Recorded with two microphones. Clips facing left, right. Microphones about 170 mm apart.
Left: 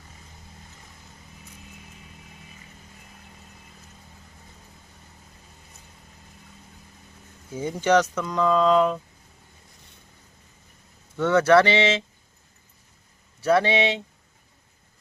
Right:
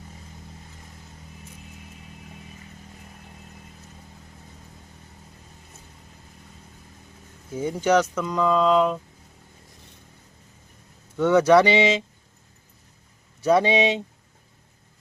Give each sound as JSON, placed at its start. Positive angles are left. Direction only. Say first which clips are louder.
{"t": 7.5, "sound": "speech", "louder": "even", "side_deg": -10}
{"t": 11.2, "sound": "speech", "louder": "right 1 dB", "side_deg": -15}
{"t": 13.4, "sound": "speech", "louder": "right 2 dB", "side_deg": -20}